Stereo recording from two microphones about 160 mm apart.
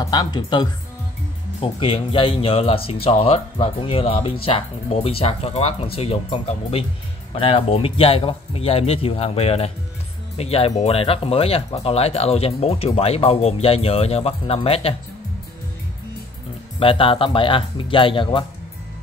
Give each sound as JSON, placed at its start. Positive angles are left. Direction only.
{"t": 0.0, "sound": "speech", "side_deg": 25}
{"t": 16.8, "sound": "speech", "side_deg": 35}